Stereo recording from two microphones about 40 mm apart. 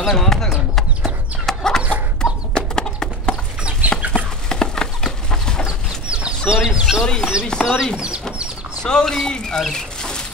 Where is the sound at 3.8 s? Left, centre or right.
Right.